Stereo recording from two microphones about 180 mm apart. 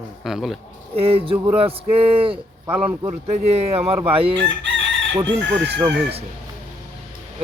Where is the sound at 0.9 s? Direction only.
30° right (ahead or behind).